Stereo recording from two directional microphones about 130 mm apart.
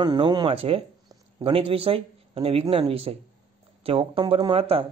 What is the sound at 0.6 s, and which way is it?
A man's voice, 45° right (ahead or behind).